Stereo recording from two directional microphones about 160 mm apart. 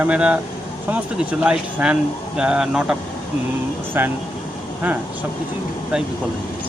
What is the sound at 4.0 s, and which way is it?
Speech, 10° right (ahead or behind).